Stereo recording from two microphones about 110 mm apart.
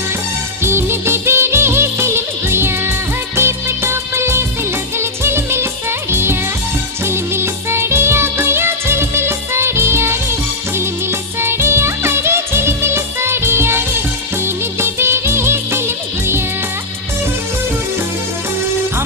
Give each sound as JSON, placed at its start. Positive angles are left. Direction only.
{"t": 0.7, "sound": "music", "side_deg": -20}
{"t": 3.3, "sound": "music of bollywood", "side_deg": -25}
{"t": 4.9, "sound": "music", "side_deg": -25}
{"t": 14.4, "sound": "music of bollywood", "side_deg": -20}